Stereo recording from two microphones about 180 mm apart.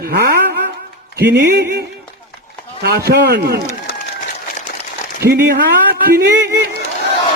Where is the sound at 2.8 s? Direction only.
60° right (ahead or behind).